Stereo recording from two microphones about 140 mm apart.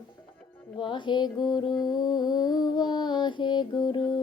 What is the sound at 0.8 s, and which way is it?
Music, 35° left (ahead or behind).